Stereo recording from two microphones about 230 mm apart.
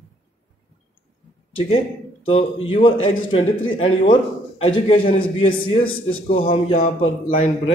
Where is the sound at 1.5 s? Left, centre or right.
Left.